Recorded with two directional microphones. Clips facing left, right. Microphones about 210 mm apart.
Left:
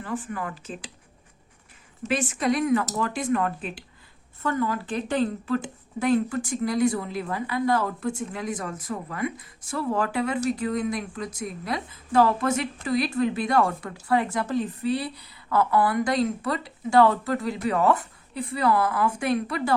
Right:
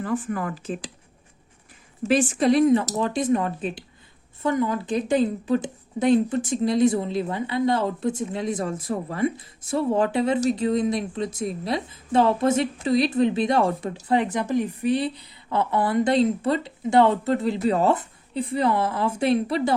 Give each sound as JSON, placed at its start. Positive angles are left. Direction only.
{"t": 0.0, "sound": "speech", "side_deg": -45}
{"t": 2.0, "sound": "a woman's voice", "side_deg": -30}